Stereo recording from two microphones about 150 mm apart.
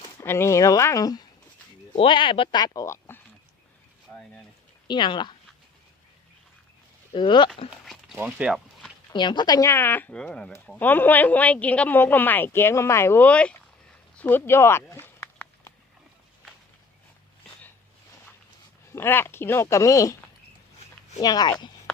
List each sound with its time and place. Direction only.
0.0 s speech: 15° left (ahead or behind)
4.9 s speech: 30° left (ahead or behind)
7.1 s speech: 35° left (ahead or behind)
8.1 s speech: 10° right (ahead or behind)
9.1 s speech: 30° left (ahead or behind); by 13.6 s 10° left (ahead or behind)
14.2 s a sound: 15° left (ahead or behind)
18.9 s speech: 15° left (ahead or behind)
21.2 s speech: 25° left (ahead or behind)